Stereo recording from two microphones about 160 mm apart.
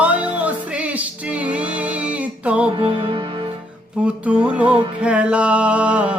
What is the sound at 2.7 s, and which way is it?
Music, 35° right (ahead or behind).